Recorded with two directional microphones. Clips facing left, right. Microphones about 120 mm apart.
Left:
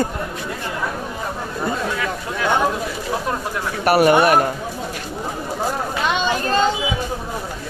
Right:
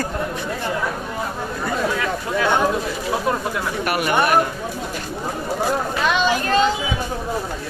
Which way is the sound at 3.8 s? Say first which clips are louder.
Left 9 dB; 40° left (ahead or behind).